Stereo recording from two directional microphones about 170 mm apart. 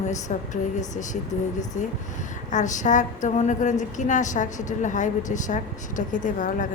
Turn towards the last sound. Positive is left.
turn(degrees=50)  # may be behind; listen again after turning